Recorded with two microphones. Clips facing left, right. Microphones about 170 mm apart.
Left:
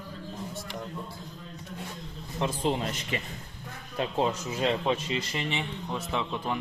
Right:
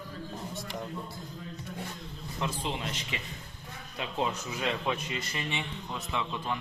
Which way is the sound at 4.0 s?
35° left (ahead or behind).